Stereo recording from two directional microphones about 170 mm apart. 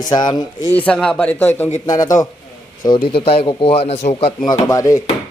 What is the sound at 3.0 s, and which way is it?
A man's voice, 35° left (ahead or behind).